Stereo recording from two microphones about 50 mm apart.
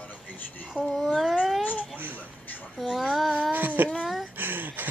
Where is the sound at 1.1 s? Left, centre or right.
Centre.